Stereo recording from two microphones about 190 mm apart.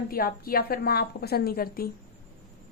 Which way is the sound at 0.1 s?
50° left (ahead or behind).